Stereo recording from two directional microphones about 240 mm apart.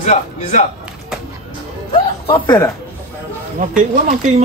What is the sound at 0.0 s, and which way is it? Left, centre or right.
Speech, left.